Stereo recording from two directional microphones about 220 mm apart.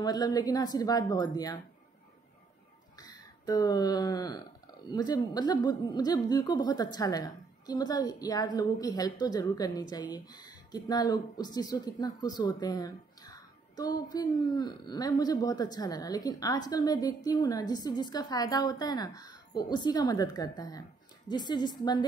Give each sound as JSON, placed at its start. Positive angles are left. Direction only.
{"t": 0.0, "sound": "speech", "side_deg": 20}
{"t": 3.0, "sound": "a woman's voice", "side_deg": 15}